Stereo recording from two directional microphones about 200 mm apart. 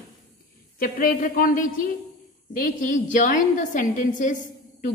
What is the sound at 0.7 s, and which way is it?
A woman's voice, 45° left (ahead or behind).